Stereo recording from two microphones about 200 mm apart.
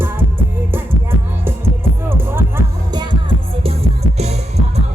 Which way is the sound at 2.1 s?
10° right (ahead or behind).